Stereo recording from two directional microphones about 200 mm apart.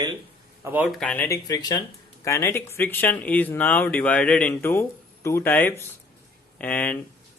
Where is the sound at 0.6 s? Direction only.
10° right (ahead or behind).